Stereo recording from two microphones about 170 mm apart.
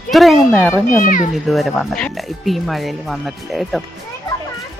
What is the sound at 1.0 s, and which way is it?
Speech, 50° left (ahead or behind).